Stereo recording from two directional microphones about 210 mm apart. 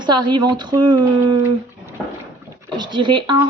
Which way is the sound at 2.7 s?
20° right (ahead or behind).